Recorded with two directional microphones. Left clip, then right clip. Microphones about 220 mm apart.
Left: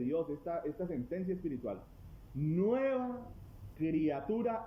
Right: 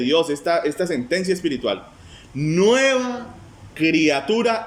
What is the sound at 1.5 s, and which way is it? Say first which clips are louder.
Speech: right 17 dB; 15° right (ahead or behind).